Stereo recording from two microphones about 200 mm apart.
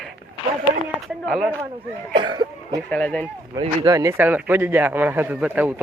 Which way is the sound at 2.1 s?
25° right (ahead or behind).